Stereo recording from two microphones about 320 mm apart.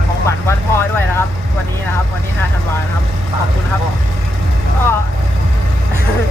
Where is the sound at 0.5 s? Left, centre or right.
Centre.